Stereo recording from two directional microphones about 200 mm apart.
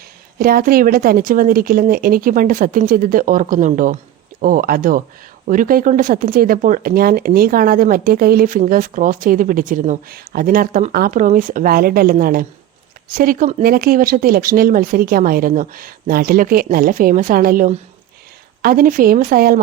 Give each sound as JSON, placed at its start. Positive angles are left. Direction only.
{"t": 0.3, "sound": "speech", "side_deg": -45}